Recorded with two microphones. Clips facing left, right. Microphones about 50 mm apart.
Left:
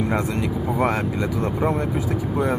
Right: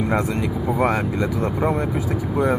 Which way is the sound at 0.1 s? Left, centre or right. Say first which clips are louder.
Right 1 dB; centre.